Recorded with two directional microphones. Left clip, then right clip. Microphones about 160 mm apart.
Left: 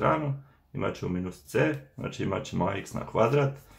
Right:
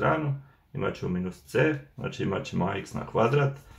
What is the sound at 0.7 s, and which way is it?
Speech, 40° left (ahead or behind).